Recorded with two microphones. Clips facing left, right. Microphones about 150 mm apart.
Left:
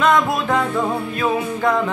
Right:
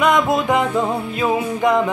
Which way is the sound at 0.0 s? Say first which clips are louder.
Right 1 dB; 15° right (ahead or behind).